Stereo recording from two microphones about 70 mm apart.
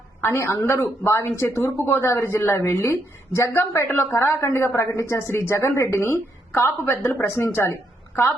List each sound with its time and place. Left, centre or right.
0.2 s a woman's voice: left